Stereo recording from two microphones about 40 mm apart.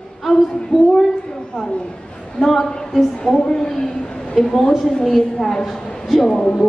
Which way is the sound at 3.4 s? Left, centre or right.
Centre.